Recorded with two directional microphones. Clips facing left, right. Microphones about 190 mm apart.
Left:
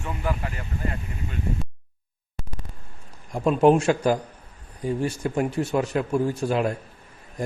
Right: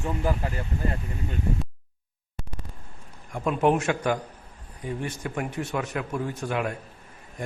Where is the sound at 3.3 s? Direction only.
30° left (ahead or behind).